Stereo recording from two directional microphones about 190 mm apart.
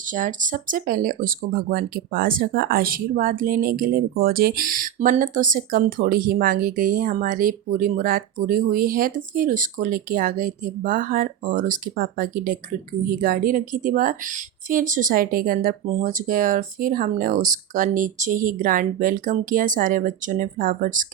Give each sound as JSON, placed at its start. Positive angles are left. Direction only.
{"t": 0.1, "sound": "speech", "side_deg": -45}